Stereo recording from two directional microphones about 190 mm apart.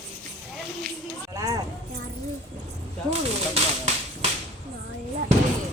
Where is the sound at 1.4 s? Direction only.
20° right (ahead or behind).